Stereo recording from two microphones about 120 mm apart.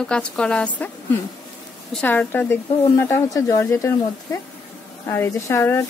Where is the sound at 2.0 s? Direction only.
15° left (ahead or behind).